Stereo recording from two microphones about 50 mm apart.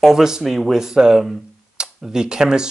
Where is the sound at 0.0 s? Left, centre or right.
Centre.